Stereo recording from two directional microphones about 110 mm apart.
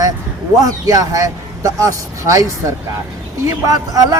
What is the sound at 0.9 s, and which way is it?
Speech, 30° right (ahead or behind).